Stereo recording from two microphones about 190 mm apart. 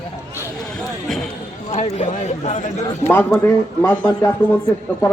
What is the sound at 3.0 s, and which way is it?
A man's voice, 10° left (ahead or behind).